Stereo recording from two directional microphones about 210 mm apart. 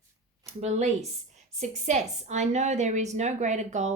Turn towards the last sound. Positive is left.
turn(degrees=-35)  # may be behind; listen again after turning